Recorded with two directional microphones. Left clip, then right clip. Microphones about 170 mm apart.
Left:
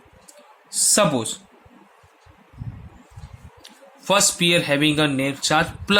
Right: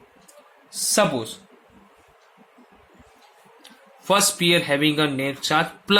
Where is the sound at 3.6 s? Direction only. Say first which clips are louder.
Even; 15° left (ahead or behind).